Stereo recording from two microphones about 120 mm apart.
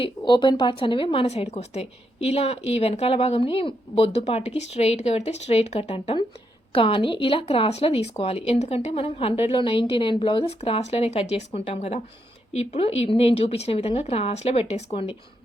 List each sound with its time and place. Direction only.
0.0 s speech: 40° left (ahead or behind)
1.3 s a woman's voice: 65° left (ahead or behind)
6.7 s a woman's voice: 50° left (ahead or behind)